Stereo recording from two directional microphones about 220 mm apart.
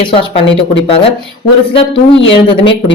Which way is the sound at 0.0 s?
25° left (ahead or behind).